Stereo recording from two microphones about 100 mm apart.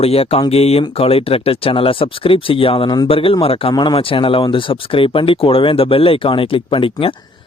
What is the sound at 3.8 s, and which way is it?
A man's voice, 55° left (ahead or behind).